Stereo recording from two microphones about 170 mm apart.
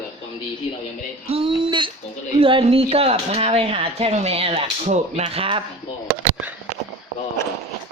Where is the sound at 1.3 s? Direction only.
30° right (ahead or behind).